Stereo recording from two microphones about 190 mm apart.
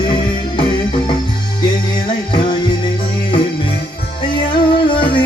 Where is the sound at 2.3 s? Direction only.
25° left (ahead or behind).